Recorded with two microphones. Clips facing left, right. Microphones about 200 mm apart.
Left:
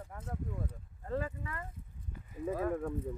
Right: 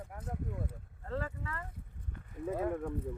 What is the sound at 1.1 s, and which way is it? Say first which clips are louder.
Speech: left 2 dB; 15° left (ahead or behind).